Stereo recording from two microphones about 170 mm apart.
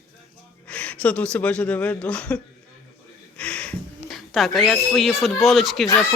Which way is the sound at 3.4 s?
5° left (ahead or behind).